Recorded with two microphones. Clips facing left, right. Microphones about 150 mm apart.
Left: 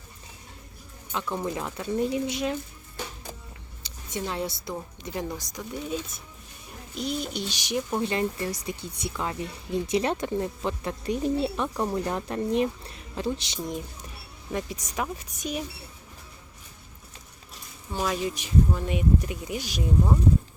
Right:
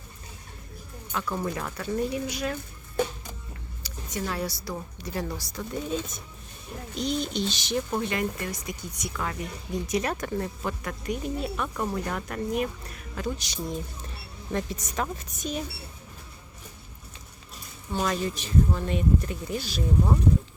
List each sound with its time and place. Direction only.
1.1 s speech: 20° left (ahead or behind)
3.8 s a woman's voice: 25° left (ahead or behind)
6.9 s speech: 5° left (ahead or behind)
8.1 s speech: 30° left (ahead or behind)
14.5 s speech: 10° left (ahead or behind)
17.9 s speech: 5° left (ahead or behind)